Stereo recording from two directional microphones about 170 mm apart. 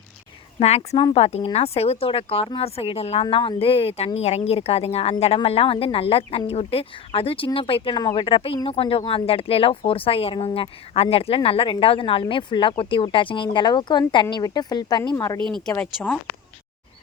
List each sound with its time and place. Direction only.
0.6 s a woman's voice: 40° left (ahead or behind); by 15.4 s 20° left (ahead or behind)
15.4 s speech: 25° right (ahead or behind)